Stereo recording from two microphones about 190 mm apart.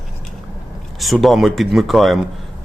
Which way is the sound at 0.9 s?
Centre (ahead or behind).